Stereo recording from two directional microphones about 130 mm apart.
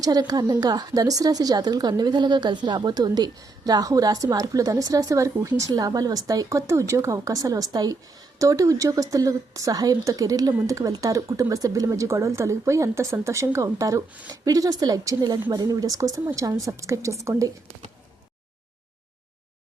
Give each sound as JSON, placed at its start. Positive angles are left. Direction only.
{"t": 0.0, "sound": "speech", "side_deg": -30}